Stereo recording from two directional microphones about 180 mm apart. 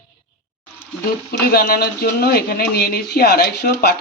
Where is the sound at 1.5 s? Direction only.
55° left (ahead or behind).